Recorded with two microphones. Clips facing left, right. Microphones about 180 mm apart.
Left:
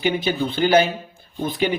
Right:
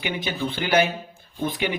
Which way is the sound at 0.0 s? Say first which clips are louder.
Left 6 dB; 30° left (ahead or behind).